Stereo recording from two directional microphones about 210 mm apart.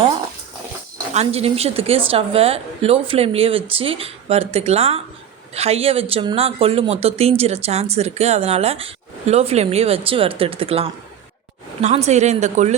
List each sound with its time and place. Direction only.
1.1 s speech: 30° right (ahead or behind)